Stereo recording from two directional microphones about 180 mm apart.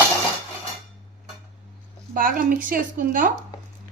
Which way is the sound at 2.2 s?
50° right (ahead or behind).